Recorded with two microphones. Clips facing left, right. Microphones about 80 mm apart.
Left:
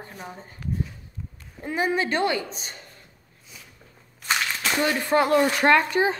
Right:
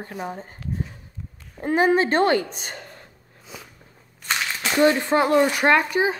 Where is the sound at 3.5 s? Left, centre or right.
Right.